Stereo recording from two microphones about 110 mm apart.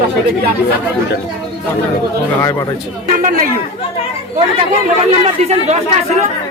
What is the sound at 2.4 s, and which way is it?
Speech, 30° left (ahead or behind).